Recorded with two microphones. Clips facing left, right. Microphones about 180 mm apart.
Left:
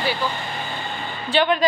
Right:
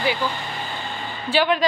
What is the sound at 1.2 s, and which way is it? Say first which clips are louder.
Speech: even; 5° right (ahead or behind).